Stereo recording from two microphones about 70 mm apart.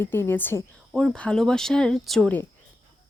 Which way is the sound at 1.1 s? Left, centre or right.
Centre.